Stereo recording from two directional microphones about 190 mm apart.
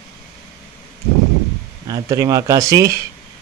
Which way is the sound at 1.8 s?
15° right (ahead or behind).